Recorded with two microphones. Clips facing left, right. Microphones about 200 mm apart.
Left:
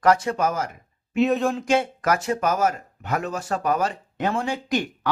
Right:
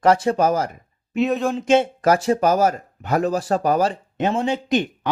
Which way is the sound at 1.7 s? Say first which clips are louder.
Right 9 dB; 25° right (ahead or behind).